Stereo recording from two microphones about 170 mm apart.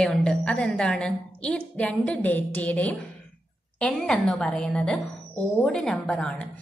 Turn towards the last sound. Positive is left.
turn(degrees=5)  # may be behind; listen again after turning